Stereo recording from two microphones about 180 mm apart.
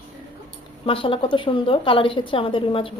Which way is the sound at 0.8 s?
30° left (ahead or behind).